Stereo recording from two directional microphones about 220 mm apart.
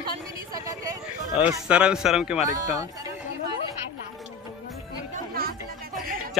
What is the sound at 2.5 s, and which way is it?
Speech, 15° right (ahead or behind).